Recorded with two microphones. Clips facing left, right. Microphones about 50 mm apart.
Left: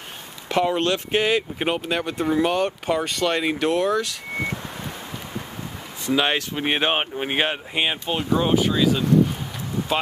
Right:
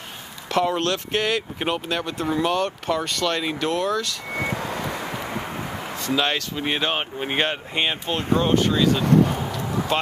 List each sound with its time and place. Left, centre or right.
0.5 s speech: centre
6.1 s speech: centre
7.2 s speech: centre